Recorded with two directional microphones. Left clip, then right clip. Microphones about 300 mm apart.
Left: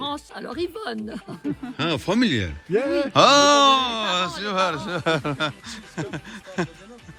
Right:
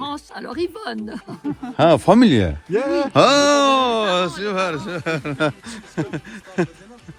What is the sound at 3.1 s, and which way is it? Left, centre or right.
A man's voice, centre.